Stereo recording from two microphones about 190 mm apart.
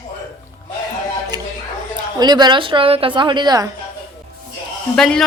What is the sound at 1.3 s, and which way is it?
A woman's voice, 20° right (ahead or behind).